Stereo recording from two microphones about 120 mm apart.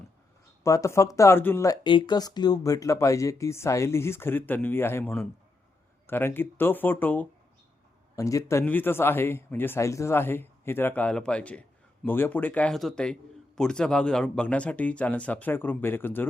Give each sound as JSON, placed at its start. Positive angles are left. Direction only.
{"t": 0.6, "sound": "speech", "side_deg": 25}
{"t": 1.8, "sound": "speech", "side_deg": 40}
{"t": 8.1, "sound": "speech", "side_deg": 25}